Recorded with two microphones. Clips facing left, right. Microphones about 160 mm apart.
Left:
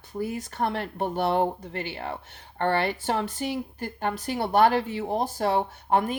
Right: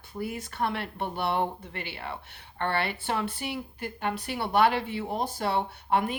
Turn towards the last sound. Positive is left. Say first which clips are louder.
# left 3 dB
turn(degrees=45)  # may be behind; listen again after turning